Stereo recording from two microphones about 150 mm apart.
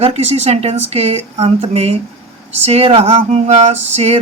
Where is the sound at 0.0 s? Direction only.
45° right (ahead or behind).